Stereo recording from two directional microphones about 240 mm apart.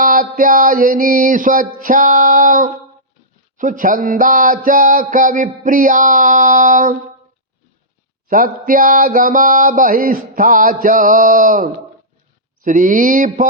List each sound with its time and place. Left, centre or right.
0.0 s mantra: right
8.3 s mantra: right